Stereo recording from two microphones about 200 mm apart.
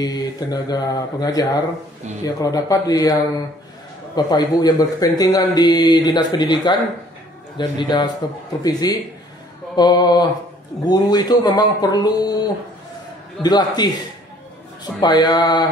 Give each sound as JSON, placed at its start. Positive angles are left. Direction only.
{"t": 0.0, "sound": "a man's voice", "side_deg": 20}
{"t": 13.4, "sound": "speech", "side_deg": 20}